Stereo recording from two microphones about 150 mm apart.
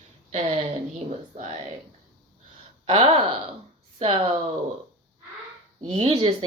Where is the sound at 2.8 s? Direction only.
40° right (ahead or behind).